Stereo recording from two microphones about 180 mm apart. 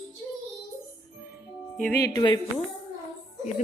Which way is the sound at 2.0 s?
20° left (ahead or behind).